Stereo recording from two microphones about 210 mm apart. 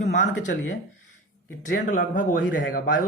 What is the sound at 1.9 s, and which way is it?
Speech, 40° left (ahead or behind).